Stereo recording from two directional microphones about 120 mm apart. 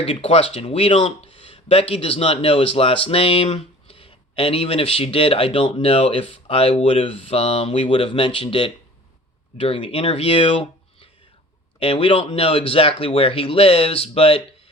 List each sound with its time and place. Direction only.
0.0 s speech: 55° left (ahead or behind)